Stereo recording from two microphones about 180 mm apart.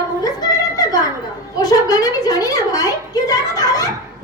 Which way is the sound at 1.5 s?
20° left (ahead or behind).